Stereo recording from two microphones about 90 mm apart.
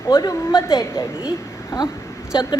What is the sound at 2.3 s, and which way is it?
Speech, 55° left (ahead or behind).